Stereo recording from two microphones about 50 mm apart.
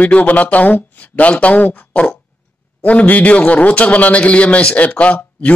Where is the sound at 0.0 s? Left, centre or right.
Left.